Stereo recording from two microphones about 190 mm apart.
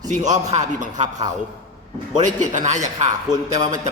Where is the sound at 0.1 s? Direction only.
40° right (ahead or behind).